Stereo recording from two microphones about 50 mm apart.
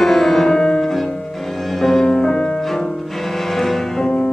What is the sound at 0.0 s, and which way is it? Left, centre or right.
Music, centre.